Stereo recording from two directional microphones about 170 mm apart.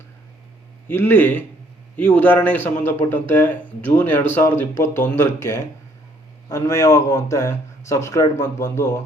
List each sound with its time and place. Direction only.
0.9 s speech: 10° left (ahead or behind)